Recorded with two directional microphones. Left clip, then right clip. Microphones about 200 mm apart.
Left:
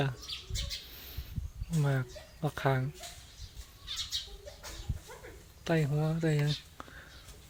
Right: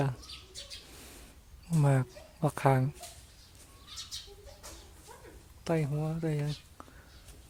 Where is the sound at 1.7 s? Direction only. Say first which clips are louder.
Right 4 dB; 25° right (ahead or behind).